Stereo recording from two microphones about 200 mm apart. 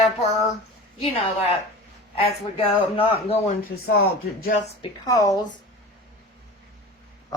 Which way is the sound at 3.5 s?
45° left (ahead or behind).